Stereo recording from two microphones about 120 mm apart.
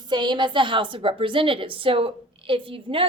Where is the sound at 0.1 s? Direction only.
40° right (ahead or behind).